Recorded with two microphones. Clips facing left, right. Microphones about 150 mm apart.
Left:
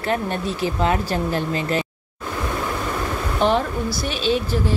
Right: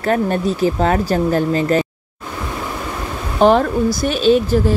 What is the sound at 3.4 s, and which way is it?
Speech, 45° right (ahead or behind).